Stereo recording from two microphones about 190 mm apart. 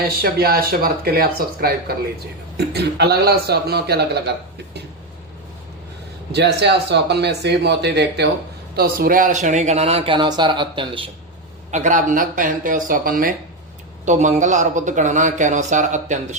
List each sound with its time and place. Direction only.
0.2 s speech: 55° right (ahead or behind)
6.3 s speech: 65° right (ahead or behind); by 11.1 s 25° right (ahead or behind)
11.7 s speech: 40° right (ahead or behind)